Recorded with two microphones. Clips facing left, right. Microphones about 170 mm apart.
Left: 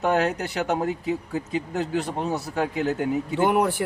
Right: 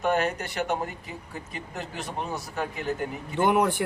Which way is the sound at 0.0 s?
80° left.